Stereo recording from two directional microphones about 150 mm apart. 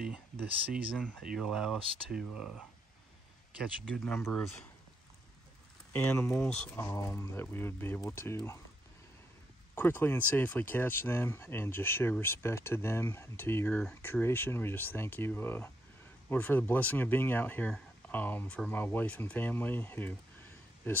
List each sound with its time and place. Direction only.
0.9 s speech: 5° left (ahead or behind)
3.9 s speech: 10° left (ahead or behind)
5.9 s speech: 15° left (ahead or behind)
6.9 s speech: 20° left (ahead or behind)
9.8 s speech: 15° left (ahead or behind)